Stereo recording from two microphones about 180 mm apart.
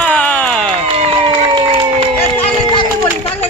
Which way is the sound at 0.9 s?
30° right (ahead or behind).